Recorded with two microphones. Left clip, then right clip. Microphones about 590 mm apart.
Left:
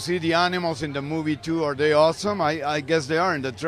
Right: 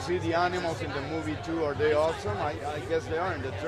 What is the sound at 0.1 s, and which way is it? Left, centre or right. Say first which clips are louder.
Speech: left 6 dB; centre.